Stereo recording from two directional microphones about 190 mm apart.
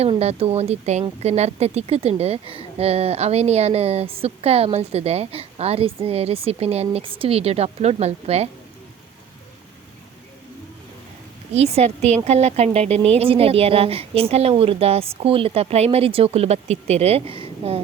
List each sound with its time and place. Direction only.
0.0 s speech: 35° right (ahead or behind)
11.5 s speech: 35° right (ahead or behind)